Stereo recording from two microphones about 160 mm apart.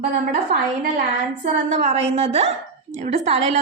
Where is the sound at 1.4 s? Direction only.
45° right (ahead or behind).